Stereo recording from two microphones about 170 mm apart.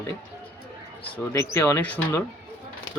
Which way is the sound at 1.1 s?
15° left (ahead or behind).